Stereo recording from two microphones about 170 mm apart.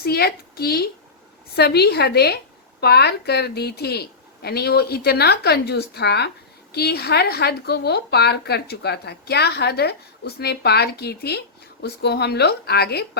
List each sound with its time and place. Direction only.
0.0 s a woman's voice: 65° left (ahead or behind)